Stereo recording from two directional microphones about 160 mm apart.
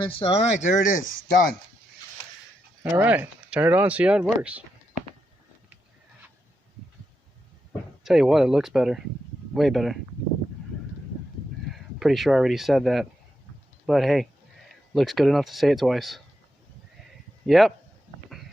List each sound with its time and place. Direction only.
0.0 s speech: 35° left (ahead or behind); by 1.5 s 60° left (ahead or behind)
2.9 s speech: 10° right (ahead or behind)
8.0 s speech: 5° right (ahead or behind)
11.7 s speech: centre (ahead or behind)
17.4 s speech: centre (ahead or behind)